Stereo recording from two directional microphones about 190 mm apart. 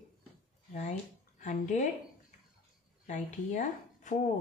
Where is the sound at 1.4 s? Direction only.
40° left (ahead or behind).